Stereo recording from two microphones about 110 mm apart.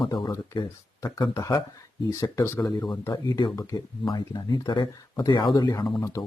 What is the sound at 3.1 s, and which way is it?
Speech, 45° left (ahead or behind).